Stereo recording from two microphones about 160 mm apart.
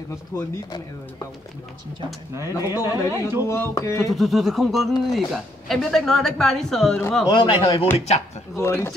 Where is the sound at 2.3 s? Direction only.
15° right (ahead or behind).